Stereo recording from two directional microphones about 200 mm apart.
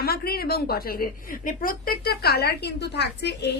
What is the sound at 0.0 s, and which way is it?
A woman's voice, 50° left (ahead or behind).